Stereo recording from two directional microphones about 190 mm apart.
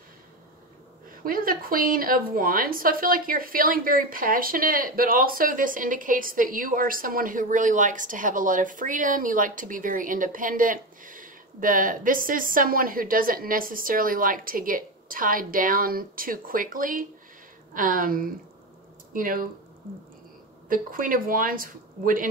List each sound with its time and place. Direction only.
1.1 s a woman's voice: 50° right (ahead or behind)
20.6 s a woman's voice: 45° right (ahead or behind)